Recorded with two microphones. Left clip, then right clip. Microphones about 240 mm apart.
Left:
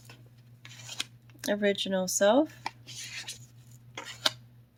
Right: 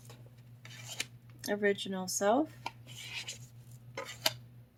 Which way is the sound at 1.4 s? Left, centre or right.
Left.